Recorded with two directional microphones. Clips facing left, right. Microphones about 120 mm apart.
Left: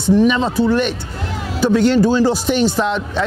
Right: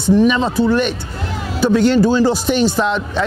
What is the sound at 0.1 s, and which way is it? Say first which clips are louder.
Speech: right 1 dB; 20° right (ahead or behind).